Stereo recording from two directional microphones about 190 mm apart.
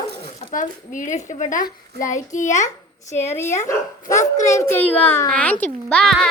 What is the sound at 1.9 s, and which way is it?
Child singing, 55° right (ahead or behind).